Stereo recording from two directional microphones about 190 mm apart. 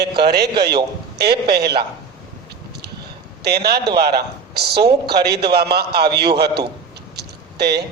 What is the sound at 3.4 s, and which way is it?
A man's voice, 60° right (ahead or behind).